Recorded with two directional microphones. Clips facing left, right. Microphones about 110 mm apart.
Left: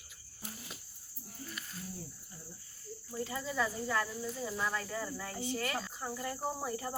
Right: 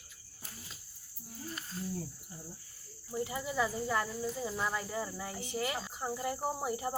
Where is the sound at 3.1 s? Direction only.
15° right (ahead or behind).